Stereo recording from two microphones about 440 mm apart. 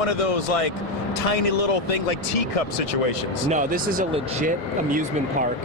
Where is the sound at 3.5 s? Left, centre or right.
Centre.